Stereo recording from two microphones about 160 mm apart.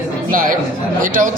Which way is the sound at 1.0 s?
60° right (ahead or behind).